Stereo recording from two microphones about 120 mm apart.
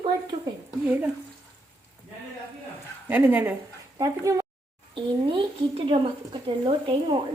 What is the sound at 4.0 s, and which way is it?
Speech, 25° right (ahead or behind).